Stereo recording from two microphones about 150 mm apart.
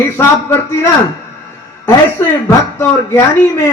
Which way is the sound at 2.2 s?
15° left (ahead or behind).